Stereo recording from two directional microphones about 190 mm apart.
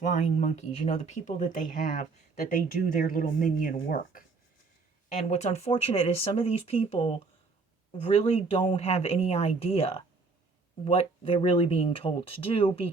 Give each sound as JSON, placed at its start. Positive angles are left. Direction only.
{"t": 0.0, "sound": "speech", "side_deg": 40}
{"t": 5.0, "sound": "speech", "side_deg": 35}